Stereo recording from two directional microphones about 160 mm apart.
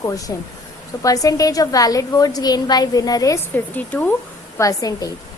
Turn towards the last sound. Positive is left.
turn(degrees=20)  # may be behind; listen again after turning